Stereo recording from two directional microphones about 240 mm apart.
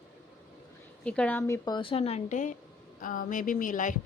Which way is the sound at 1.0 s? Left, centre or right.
Centre.